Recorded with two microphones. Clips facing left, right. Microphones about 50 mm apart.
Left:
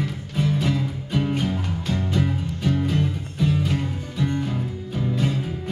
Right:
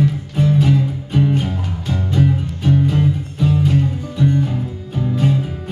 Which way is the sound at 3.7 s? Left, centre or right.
Centre.